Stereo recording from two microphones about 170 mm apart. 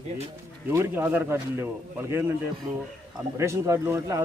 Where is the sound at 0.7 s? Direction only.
15° right (ahead or behind).